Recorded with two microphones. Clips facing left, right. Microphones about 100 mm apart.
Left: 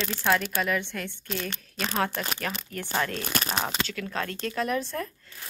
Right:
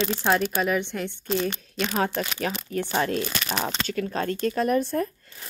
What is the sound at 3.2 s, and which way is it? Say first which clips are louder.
Crumpling: right 1 dB; 45° left (ahead or behind).